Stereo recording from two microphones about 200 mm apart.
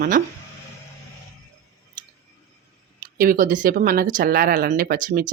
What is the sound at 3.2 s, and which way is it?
Speech, 45° right (ahead or behind).